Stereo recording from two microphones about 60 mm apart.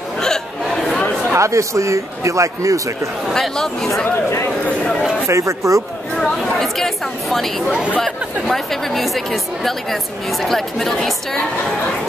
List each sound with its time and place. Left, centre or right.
1.3 s a man's voice: right
3.3 s speech: centre
5.3 s a man's voice: right
6.1 s speech: centre